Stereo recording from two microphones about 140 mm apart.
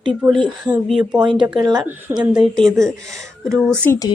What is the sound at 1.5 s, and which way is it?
Speech, 30° right (ahead or behind).